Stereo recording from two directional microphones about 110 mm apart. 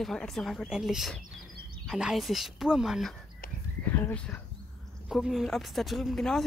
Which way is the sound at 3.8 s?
15° left (ahead or behind).